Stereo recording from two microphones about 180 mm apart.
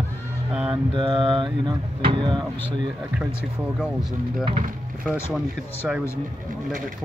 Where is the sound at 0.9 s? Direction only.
30° right (ahead or behind).